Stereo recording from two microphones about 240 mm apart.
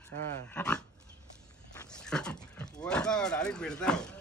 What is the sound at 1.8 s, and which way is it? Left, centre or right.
Dog, centre.